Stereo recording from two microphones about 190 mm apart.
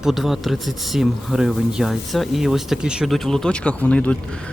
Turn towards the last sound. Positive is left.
turn(degrees=5)  # may be behind; listen again after turning